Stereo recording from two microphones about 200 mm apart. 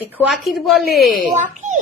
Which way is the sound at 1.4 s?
40° right (ahead or behind).